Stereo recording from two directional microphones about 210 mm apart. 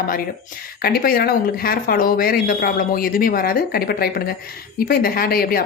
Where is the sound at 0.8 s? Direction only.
45° left (ahead or behind).